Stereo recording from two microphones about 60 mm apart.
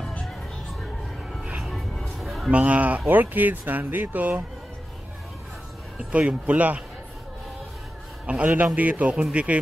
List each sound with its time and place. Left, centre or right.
1.6 s music: centre
2.5 s speech: right
6.1 s speech: right
8.3 s speech: right